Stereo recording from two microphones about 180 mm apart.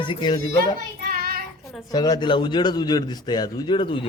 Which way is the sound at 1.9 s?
20° left (ahead or behind).